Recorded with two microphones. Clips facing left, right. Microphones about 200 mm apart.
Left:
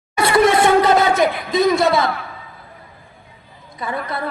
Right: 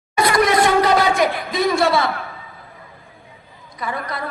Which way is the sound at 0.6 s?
25° left (ahead or behind).